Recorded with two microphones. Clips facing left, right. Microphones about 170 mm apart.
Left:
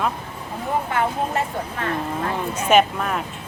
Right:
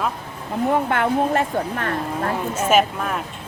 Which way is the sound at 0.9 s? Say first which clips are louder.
Right 4 dB; 60° right (ahead or behind).